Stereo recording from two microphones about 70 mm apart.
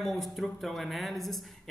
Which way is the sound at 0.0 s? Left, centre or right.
Centre.